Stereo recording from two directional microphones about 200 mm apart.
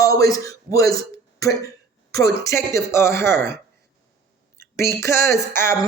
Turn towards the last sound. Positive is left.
turn(degrees=15)  # may be behind; listen again after turning